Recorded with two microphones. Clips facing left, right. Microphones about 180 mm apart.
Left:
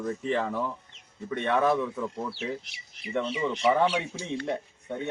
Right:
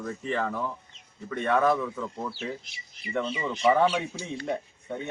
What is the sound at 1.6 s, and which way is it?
Speech, centre (ahead or behind).